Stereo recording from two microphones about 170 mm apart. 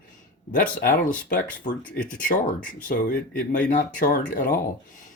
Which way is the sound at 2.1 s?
50° left (ahead or behind).